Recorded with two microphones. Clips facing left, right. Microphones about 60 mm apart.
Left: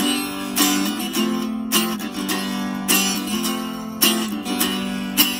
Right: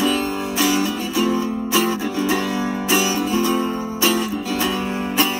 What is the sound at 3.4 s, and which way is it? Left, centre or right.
Music, centre.